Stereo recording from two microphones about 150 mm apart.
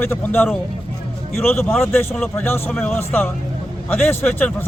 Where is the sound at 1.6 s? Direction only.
5° left (ahead or behind).